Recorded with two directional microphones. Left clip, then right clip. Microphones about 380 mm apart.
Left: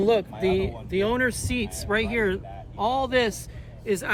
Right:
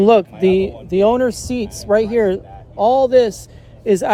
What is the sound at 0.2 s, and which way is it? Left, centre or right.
Speech, right.